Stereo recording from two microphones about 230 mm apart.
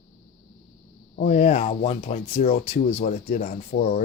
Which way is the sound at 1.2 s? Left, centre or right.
Left.